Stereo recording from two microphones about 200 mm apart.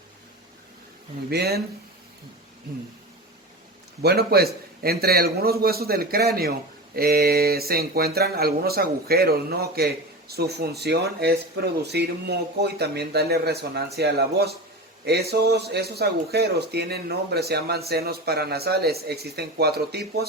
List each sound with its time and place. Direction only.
1.3 s speech: 55° right (ahead or behind)
4.0 s speech: 50° right (ahead or behind)